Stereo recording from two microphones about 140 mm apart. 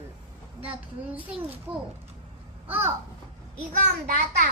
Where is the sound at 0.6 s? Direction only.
10° right (ahead or behind).